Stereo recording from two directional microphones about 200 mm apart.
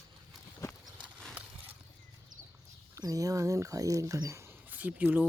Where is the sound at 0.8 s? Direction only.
5° right (ahead or behind).